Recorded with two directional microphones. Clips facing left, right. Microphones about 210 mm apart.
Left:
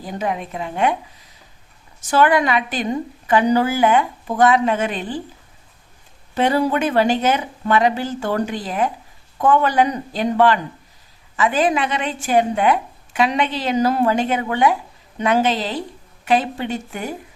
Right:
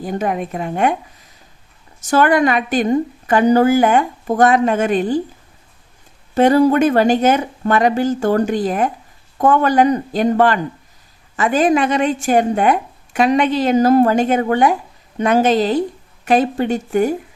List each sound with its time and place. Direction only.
0.0 s a woman's voice: 50° right (ahead or behind)
2.0 s a woman's voice: 45° right (ahead or behind)
6.3 s a woman's voice: 45° right (ahead or behind)